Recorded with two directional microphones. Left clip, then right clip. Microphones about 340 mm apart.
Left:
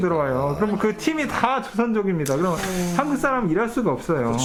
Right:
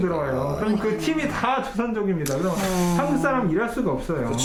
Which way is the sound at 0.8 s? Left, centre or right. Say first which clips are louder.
Left 1 dB; left.